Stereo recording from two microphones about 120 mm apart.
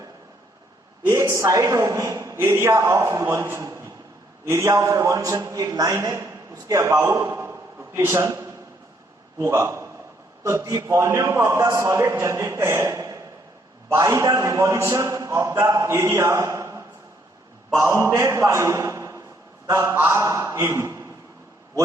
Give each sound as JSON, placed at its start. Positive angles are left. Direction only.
{"t": 1.0, "sound": "a man's voice", "side_deg": -25}